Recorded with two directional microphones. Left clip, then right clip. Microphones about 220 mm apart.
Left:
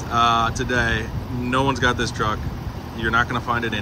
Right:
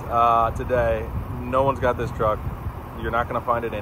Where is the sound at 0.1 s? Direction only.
35° left (ahead or behind).